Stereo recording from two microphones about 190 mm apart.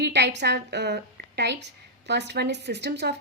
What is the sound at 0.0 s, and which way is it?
A woman's voice, 60° right (ahead or behind).